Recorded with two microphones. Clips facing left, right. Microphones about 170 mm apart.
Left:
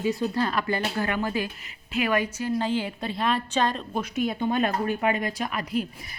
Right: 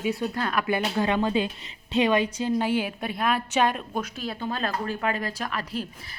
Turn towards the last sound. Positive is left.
turn(degrees=10)  # may be behind; listen again after turning